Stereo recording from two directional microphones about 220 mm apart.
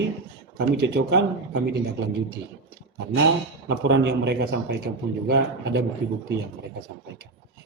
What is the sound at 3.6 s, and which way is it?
Speech, 55° right (ahead or behind).